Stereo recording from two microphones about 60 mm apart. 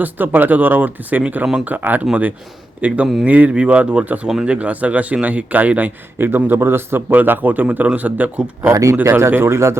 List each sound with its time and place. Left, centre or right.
0.0 s a man's voice: right
7.2 s a man's voice: right
8.7 s speech: right
9.0 s speech: right